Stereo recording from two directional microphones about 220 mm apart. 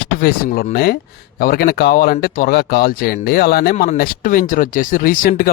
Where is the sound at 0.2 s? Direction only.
40° left (ahead or behind).